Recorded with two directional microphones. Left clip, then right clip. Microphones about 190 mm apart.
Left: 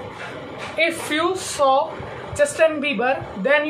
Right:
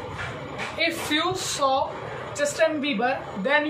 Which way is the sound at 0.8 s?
10° left (ahead or behind).